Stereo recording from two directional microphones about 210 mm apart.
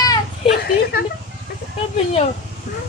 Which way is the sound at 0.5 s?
50° left (ahead or behind).